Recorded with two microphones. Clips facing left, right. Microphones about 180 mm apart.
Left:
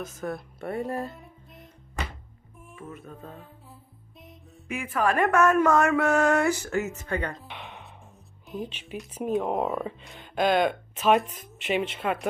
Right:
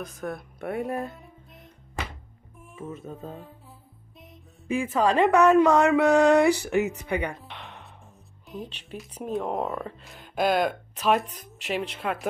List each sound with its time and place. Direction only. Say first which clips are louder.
0.0 s speech: left 1 dB; centre (ahead or behind)
2.7 s music: right 4 dB; centre (ahead or behind)
3.2 s speech: right 4 dB; centre (ahead or behind)
4.6 s speech: right 3 dB; 25° right (ahead or behind)
7.4 s music: left 1 dB; centre (ahead or behind)
8.5 s speech: left 3 dB; centre (ahead or behind)